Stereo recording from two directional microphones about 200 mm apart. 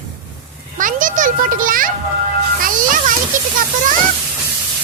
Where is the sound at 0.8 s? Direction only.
40° right (ahead or behind).